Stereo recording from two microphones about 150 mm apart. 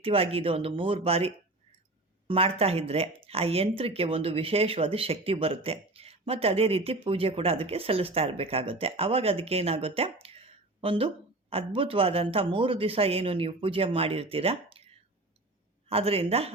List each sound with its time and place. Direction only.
0.0 s speech: 40° right (ahead or behind)
15.9 s speech: 40° right (ahead or behind)